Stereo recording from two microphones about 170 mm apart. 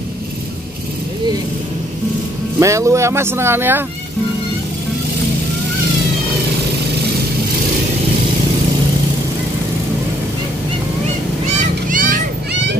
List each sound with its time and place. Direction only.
2.6 s speech: 15° right (ahead or behind)
11.9 s children playing: 50° right (ahead or behind)